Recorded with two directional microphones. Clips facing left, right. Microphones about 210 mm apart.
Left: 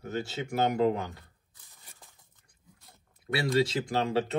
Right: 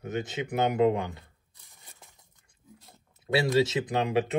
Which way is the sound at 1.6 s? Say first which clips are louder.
Right 1 dB; 15° right (ahead or behind).